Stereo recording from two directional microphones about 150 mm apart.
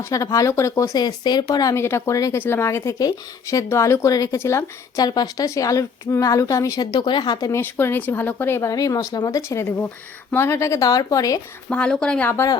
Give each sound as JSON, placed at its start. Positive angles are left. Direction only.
{"t": 0.0, "sound": "speech", "side_deg": 25}
{"t": 7.6, "sound": "speech", "side_deg": 15}
{"t": 11.7, "sound": "speech", "side_deg": 5}